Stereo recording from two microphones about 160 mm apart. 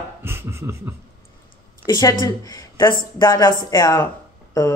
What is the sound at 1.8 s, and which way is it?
Speech, 20° left (ahead or behind).